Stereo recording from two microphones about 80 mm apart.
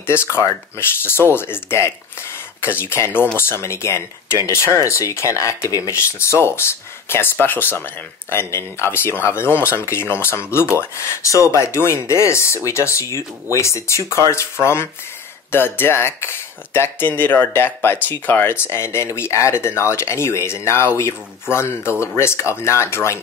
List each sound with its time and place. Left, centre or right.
0.0 s speech: left